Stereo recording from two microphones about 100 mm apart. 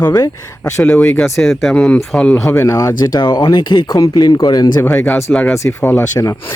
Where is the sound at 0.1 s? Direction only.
40° left (ahead or behind).